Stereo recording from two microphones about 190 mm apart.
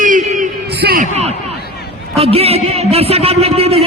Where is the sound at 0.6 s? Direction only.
60° right (ahead or behind).